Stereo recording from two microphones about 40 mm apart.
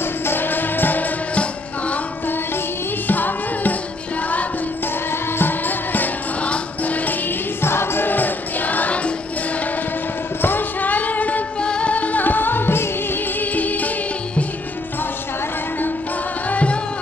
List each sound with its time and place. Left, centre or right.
0.0 s music: left
1.3 s music: left
2.2 s music: left
3.1 s tabla: left
5.1 s music: left
6.4 s music: left
7.2 s music: left
8.1 s music: left
10.4 s a sound: left
11.6 s music: left
11.9 s music: left
13.4 s music: left
16.4 s music: left